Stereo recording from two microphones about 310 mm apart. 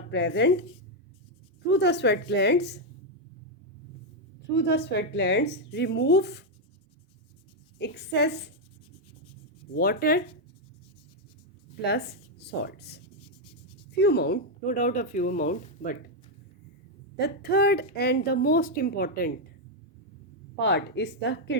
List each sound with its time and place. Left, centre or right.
0.1 s a woman's voice: left
1.6 s a woman's voice: left
4.5 s a woman's voice: left
7.8 s a woman's voice: left
9.7 s speech: left
11.8 s a woman's voice: left
14.0 s speech: left
17.2 s a woman's voice: left
20.6 s a woman's voice: left